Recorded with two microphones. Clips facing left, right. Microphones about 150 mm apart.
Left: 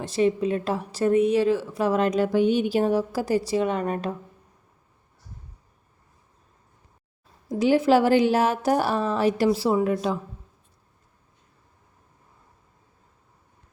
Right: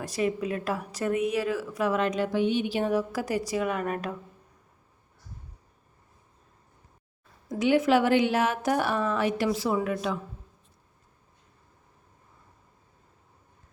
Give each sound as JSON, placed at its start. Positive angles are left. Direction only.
{"t": 0.0, "sound": "a woman's voice", "side_deg": 25}
{"t": 7.4, "sound": "a woman's voice", "side_deg": 30}